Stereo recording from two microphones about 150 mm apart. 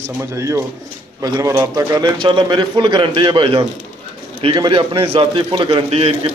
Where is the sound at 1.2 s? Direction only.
25° right (ahead or behind).